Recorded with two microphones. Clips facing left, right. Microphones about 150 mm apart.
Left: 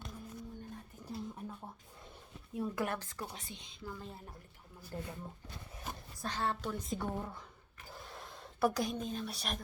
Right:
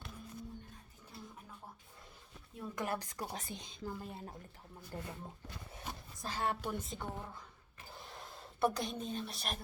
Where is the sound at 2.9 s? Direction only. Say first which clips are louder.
Right 1 dB; 15° right (ahead or behind).